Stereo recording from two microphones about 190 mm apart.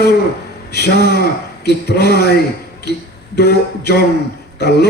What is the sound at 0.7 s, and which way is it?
A man's voice, 60° left (ahead or behind).